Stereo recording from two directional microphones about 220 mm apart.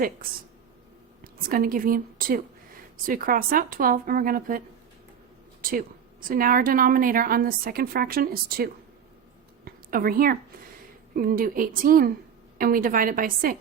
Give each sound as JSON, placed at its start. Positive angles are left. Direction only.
{"t": 1.2, "sound": "a woman's voice", "side_deg": -40}
{"t": 5.6, "sound": "a woman's voice", "side_deg": -40}
{"t": 9.6, "sound": "a sound", "side_deg": -40}
{"t": 11.1, "sound": "a woman's voice", "side_deg": -40}